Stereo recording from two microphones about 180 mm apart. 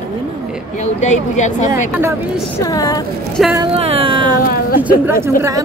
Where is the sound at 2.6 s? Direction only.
20° left (ahead or behind).